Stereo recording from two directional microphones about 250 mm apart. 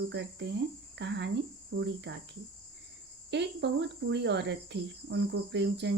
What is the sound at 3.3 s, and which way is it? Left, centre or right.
Speech, right.